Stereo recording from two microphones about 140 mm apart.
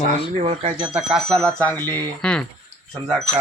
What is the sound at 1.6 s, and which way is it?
Speech, 15° left (ahead or behind).